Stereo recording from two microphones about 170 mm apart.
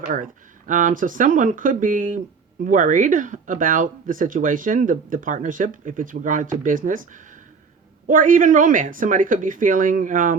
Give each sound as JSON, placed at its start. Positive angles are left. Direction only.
{"t": 0.7, "sound": "speech", "side_deg": -50}